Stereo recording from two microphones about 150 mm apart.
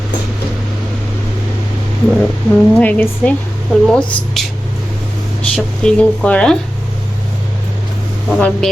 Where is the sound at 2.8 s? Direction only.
10° left (ahead or behind).